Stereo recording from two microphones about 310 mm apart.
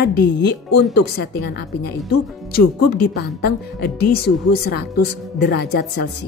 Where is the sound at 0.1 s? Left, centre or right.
Left.